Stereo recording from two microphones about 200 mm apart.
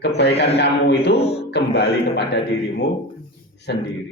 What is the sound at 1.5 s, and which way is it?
Speech, 55° left (ahead or behind).